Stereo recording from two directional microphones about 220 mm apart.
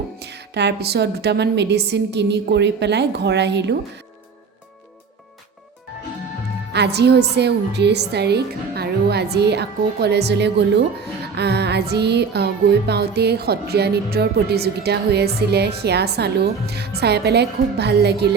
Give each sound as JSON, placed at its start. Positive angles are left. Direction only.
{"t": 0.2, "sound": "a woman's voice", "side_deg": -50}
{"t": 6.7, "sound": "a woman's voice", "side_deg": -50}